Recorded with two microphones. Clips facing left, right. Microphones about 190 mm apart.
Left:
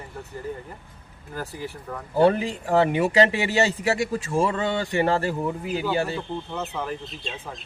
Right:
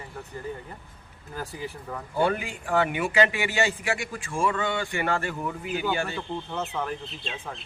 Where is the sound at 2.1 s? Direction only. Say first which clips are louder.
Left 7 dB; 35° left (ahead or behind).